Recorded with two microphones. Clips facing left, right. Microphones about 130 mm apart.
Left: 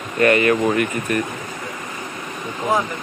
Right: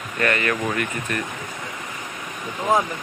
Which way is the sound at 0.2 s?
15° left (ahead or behind).